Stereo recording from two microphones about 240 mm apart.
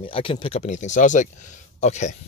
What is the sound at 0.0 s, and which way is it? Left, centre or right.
Speech, left.